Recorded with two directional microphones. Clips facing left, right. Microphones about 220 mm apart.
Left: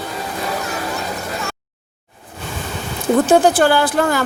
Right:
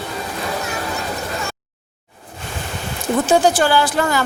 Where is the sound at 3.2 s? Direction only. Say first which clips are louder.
Left 2 dB; 55° left (ahead or behind).